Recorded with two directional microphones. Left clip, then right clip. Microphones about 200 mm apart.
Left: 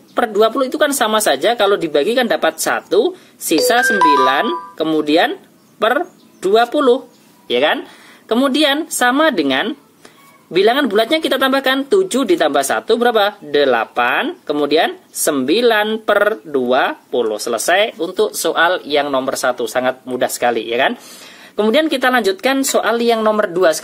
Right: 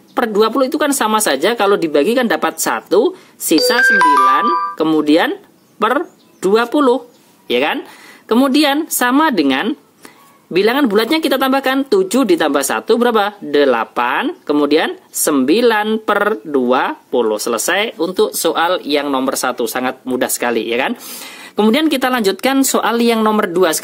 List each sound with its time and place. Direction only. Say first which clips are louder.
0.1 s speech: even; 30° right (ahead or behind)
4.7 s speech: left 3 dB; 30° right (ahead or behind)